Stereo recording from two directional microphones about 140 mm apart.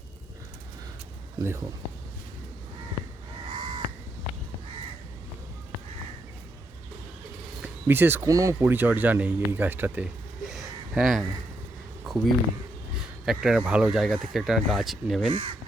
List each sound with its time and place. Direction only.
1.4 s speech: 20° right (ahead or behind)
3.5 s crow: 40° right (ahead or behind)
7.6 s speech: 15° right (ahead or behind)
10.4 s a sound: centre (ahead or behind)
12.0 s speech: centre (ahead or behind)
15.3 s speech: 35° right (ahead or behind)